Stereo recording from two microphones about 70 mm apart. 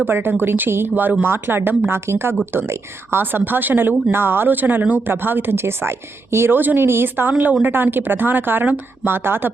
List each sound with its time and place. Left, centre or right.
0.1 s speech: right